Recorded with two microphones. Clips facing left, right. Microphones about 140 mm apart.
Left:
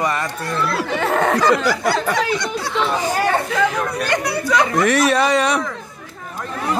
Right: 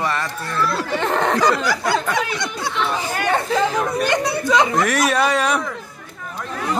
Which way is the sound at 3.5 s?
30° right (ahead or behind).